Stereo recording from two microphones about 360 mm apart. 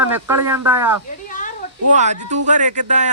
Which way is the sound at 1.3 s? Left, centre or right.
Left.